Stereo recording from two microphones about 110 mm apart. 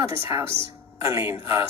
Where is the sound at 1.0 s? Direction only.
25° right (ahead or behind).